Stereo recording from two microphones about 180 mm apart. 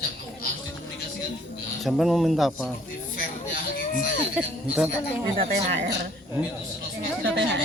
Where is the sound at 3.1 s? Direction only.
50° left (ahead or behind).